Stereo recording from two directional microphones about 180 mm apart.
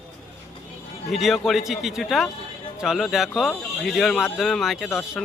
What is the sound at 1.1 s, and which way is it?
Speech, centre (ahead or behind).